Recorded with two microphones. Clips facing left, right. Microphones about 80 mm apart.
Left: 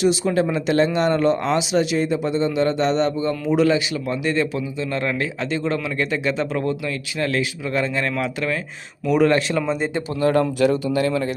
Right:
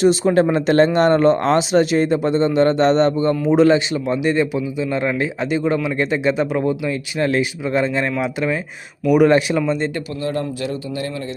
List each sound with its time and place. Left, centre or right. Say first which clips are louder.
0.0 s a man's voice: right 4 dB; right; by 9.6 s centre
9.6 s speech: right 3 dB; centre
10.2 s speech: left 7 dB; left